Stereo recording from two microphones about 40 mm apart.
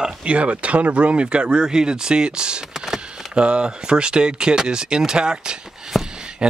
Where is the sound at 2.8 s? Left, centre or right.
Centre.